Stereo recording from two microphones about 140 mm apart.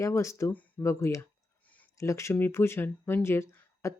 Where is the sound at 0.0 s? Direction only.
20° left (ahead or behind).